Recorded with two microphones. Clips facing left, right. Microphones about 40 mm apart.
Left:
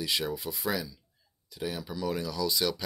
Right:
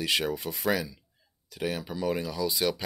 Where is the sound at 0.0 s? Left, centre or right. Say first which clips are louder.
Right 3 dB; right.